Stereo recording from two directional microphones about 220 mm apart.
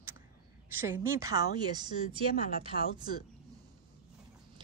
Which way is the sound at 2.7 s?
45° left (ahead or behind).